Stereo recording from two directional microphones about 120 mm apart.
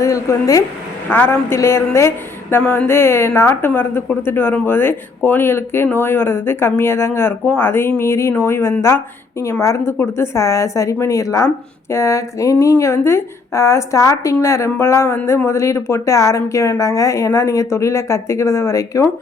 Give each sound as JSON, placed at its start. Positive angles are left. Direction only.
{"t": 0.0, "sound": "a woman's voice", "side_deg": 25}